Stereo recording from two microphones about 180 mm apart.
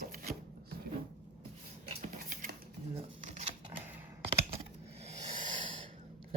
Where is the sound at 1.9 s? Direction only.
55° right (ahead or behind).